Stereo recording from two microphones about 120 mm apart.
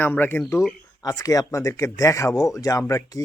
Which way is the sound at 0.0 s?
15° left (ahead or behind).